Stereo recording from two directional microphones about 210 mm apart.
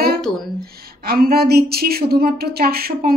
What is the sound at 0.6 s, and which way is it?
A woman's voice, 45° right (ahead or behind).